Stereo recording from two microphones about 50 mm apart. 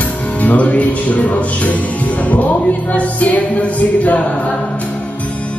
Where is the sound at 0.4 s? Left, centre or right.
Left.